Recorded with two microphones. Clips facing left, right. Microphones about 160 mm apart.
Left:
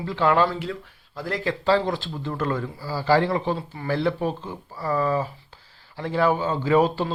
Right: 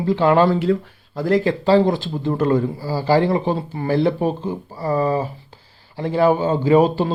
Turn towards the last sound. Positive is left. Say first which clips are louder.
# right 5 dB
turn(degrees=-15)  # may be behind; listen again after turning